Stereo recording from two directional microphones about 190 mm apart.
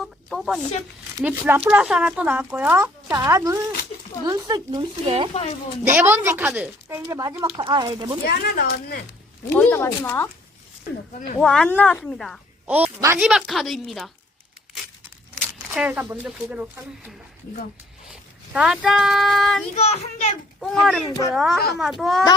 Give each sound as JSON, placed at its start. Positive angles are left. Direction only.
{"t": 0.0, "sound": "speech", "side_deg": 0}
{"t": 5.8, "sound": "speech", "side_deg": -10}
{"t": 8.3, "sound": "speech", "side_deg": 50}
{"t": 9.6, "sound": "speech", "side_deg": 10}
{"t": 11.3, "sound": "a woman's voice", "side_deg": 5}
{"t": 12.6, "sound": "speech", "side_deg": -10}
{"t": 13.2, "sound": "a woman's voice", "side_deg": 0}
{"t": 15.7, "sound": "speech", "side_deg": -5}
{"t": 18.1, "sound": "speech", "side_deg": -5}
{"t": 19.7, "sound": "a child's voice", "side_deg": 35}
{"t": 20.6, "sound": "a woman's voice", "side_deg": 0}